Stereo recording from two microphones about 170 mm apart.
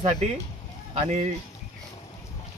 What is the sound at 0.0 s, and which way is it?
Speech, 40° right (ahead or behind).